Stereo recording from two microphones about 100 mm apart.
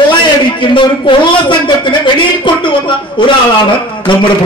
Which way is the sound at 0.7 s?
55° left (ahead or behind).